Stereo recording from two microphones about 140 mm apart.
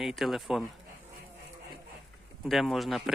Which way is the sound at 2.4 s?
Centre (ahead or behind).